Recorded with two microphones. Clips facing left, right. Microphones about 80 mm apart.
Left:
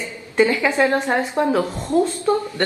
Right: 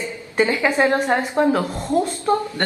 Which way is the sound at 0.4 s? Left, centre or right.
Right.